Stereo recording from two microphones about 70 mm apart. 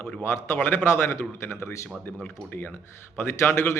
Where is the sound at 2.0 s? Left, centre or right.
Left.